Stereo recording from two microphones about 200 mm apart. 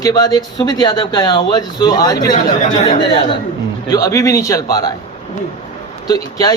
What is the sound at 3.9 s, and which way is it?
Speech, 15° left (ahead or behind).